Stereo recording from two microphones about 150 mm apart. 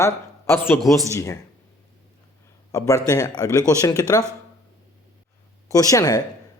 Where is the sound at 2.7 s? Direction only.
20° left (ahead or behind).